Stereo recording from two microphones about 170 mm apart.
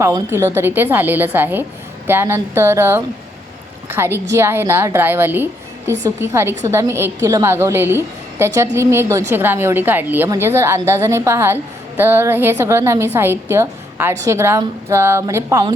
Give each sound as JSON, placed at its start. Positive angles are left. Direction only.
{"t": 0.0, "sound": "a woman's voice", "side_deg": -15}